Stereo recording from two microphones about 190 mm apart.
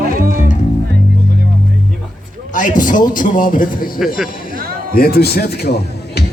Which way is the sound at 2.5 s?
45° left (ahead or behind).